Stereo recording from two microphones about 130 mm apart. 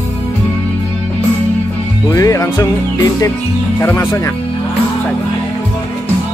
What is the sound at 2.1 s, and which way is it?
Music, 25° left (ahead or behind).